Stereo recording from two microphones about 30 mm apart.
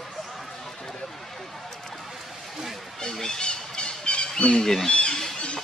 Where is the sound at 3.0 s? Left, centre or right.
Centre.